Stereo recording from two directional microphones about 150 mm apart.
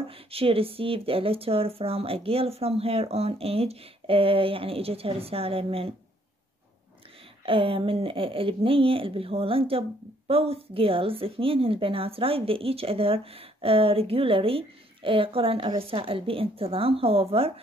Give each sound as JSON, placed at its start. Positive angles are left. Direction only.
{"t": 0.1, "sound": "speech", "side_deg": -40}
{"t": 7.4, "sound": "speech", "side_deg": -35}